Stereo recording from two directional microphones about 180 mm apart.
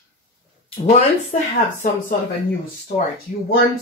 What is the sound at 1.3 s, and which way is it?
Speech, 40° left (ahead or behind).